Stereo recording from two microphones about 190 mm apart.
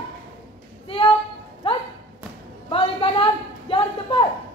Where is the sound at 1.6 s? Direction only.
30° left (ahead or behind).